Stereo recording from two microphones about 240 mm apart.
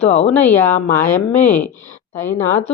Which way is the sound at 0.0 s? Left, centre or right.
Left.